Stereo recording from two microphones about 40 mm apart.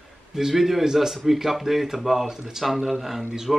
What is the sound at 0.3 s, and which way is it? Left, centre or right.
Speech, centre.